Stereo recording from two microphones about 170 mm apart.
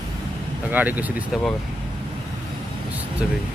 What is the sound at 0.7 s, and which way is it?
Speech, 10° right (ahead or behind).